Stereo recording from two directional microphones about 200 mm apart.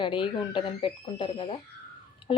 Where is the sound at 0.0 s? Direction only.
25° left (ahead or behind).